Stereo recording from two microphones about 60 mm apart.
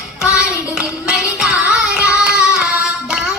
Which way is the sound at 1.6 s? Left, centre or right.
Centre.